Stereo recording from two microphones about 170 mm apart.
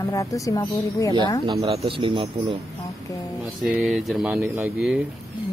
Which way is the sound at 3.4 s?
Centre (ahead or behind).